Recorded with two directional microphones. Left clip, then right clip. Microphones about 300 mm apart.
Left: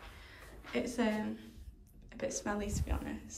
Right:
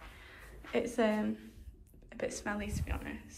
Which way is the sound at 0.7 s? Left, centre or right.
Centre.